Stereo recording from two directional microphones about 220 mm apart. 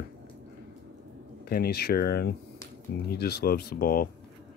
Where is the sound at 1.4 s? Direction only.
45° left (ahead or behind).